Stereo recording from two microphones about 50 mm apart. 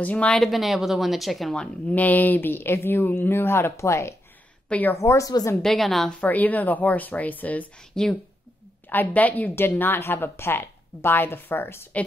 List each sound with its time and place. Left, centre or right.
0.0 s speech: left
0.4 s speech: centre
1.9 s speech: left
4.9 s a woman's voice: left
5.6 s speech: centre
6.2 s speech: left
8.0 s a woman's voice: centre
8.9 s speech: left
9.6 s speech: left